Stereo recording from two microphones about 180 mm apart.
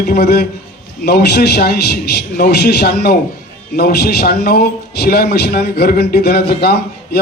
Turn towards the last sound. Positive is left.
turn(degrees=65)  # may be behind; listen again after turning